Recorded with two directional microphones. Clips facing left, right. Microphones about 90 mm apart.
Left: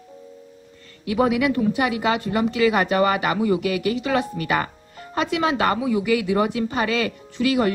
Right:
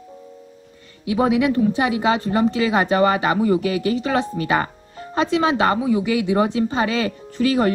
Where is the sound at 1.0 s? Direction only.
25° right (ahead or behind).